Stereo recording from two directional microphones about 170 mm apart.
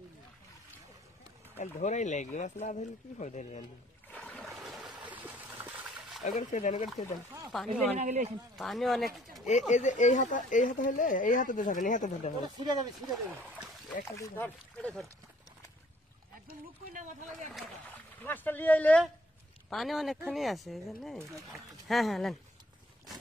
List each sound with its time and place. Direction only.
1.6 s speech: 45° left (ahead or behind)
4.1 s trickle: 5° left (ahead or behind)
6.2 s speech: 45° left (ahead or behind)
7.5 s speech: centre (ahead or behind)
8.0 s speech: 40° right (ahead or behind)
8.5 s speech: centre (ahead or behind)
9.5 s speech: 45° left (ahead or behind)
12.4 s speech: 25° right (ahead or behind)
14.2 s speech: 10° left (ahead or behind)
17.6 s speech: 10° left (ahead or behind)